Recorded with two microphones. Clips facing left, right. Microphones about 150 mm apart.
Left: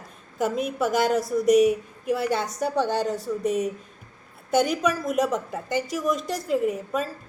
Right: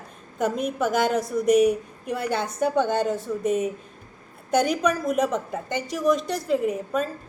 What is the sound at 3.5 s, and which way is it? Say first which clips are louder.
A woman's voice: right 1 dB; 5° right (ahead or behind).